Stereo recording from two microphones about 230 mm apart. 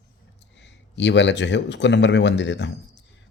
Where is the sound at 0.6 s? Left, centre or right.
Left.